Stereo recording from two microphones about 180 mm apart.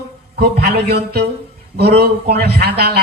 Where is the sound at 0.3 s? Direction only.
60° right (ahead or behind).